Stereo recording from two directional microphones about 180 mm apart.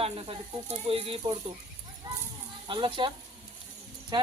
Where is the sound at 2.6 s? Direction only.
25° right (ahead or behind).